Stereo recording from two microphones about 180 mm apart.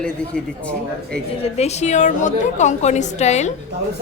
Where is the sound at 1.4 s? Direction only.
35° left (ahead or behind).